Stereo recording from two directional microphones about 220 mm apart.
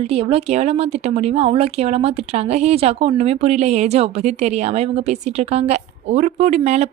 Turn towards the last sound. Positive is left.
turn(degrees=-30)  # may be behind; listen again after turning